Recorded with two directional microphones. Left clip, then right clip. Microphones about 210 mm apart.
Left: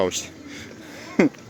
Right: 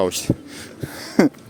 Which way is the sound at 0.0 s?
25° right (ahead or behind).